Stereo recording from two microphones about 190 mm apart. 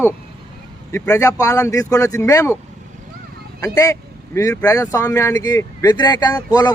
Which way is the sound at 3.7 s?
15° left (ahead or behind).